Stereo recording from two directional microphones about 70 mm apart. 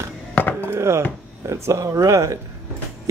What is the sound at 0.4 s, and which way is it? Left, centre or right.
Chop, left.